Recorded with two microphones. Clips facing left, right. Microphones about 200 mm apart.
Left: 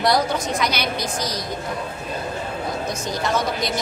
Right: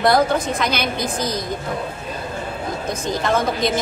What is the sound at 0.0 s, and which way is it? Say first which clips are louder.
A woman's voice: right 4 dB; 55° right (ahead or behind).